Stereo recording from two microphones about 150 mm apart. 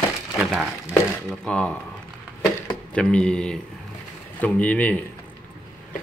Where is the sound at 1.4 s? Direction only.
5° left (ahead or behind).